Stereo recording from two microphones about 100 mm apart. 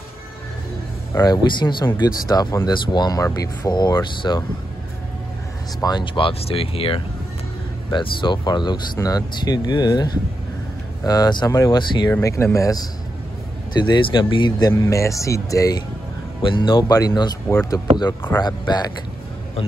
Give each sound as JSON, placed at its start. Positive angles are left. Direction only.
{"t": 1.1, "sound": "speech", "side_deg": 40}
{"t": 5.8, "sound": "speech", "side_deg": 45}
{"t": 7.9, "sound": "speech", "side_deg": 50}
{"t": 11.1, "sound": "speech", "side_deg": 45}
{"t": 13.7, "sound": "speech", "side_deg": 50}
{"t": 14.8, "sound": "speech", "side_deg": 30}
{"t": 16.4, "sound": "speech", "side_deg": 55}
{"t": 16.8, "sound": "speech", "side_deg": 40}